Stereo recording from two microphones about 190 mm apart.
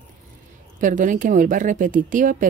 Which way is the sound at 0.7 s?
45° right (ahead or behind).